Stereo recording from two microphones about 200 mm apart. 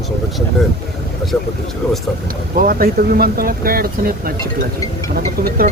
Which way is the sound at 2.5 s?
45° right (ahead or behind).